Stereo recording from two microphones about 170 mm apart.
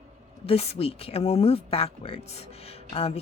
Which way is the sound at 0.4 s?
35° left (ahead or behind).